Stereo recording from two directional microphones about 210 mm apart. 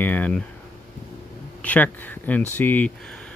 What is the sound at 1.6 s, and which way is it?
Speech, 5° left (ahead or behind).